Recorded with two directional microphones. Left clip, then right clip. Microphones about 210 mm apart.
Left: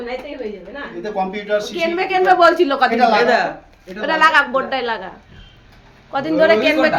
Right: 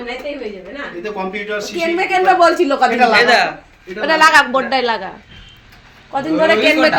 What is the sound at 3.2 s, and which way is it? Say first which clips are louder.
Speech: right 3 dB; 25° left (ahead or behind).